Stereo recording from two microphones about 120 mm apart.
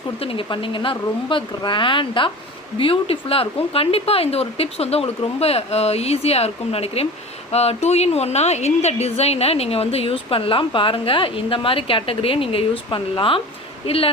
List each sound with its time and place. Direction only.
0.2 s a woman's voice: 50° left (ahead or behind)